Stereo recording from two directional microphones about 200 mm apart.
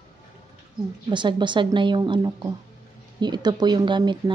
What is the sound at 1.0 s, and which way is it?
Speech, 25° right (ahead or behind).